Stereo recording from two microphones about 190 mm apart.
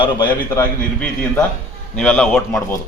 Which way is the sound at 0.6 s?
5° left (ahead or behind).